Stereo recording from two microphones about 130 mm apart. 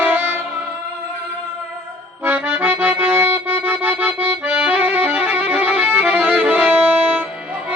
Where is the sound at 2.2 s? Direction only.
15° right (ahead or behind).